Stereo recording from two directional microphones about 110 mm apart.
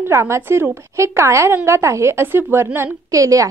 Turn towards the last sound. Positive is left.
turn(degrees=-30)  # may be behind; listen again after turning